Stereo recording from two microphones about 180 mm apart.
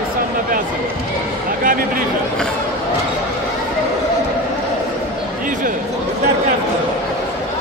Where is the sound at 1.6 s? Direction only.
50° right (ahead or behind).